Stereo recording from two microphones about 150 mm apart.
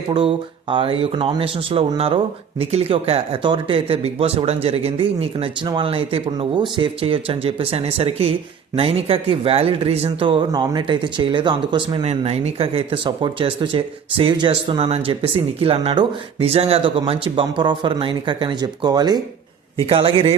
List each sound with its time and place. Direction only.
0.1 s speech: 35° right (ahead or behind)
12.0 s speech: 40° right (ahead or behind)
19.9 s speech: 35° right (ahead or behind)